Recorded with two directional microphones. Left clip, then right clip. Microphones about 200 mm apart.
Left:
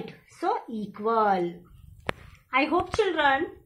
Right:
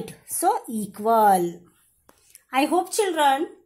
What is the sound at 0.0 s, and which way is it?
A woman's voice, 60° right (ahead or behind).